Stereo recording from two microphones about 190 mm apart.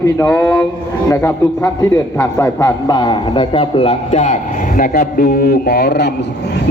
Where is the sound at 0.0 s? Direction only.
15° left (ahead or behind).